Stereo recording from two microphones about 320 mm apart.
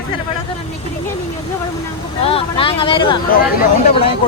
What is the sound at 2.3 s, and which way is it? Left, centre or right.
Speech, centre.